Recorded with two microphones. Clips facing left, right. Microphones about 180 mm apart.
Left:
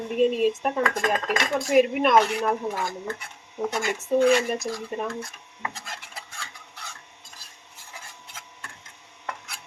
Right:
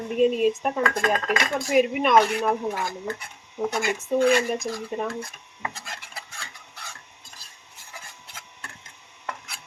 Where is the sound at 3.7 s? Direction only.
5° right (ahead or behind).